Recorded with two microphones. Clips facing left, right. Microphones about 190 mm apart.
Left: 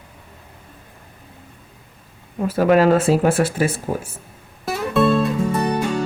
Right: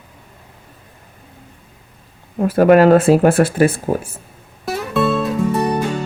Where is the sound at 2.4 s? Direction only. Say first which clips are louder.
Right 5 dB; 55° right (ahead or behind).